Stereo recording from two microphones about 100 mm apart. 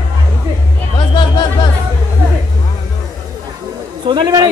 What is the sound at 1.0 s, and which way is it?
Music, 50° left (ahead or behind).